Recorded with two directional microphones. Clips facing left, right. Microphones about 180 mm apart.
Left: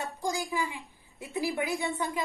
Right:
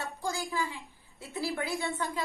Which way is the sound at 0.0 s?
15° left (ahead or behind).